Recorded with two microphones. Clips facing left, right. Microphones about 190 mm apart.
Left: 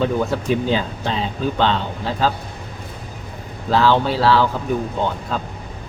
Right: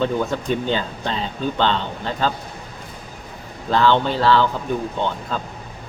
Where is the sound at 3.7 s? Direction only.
5° left (ahead or behind).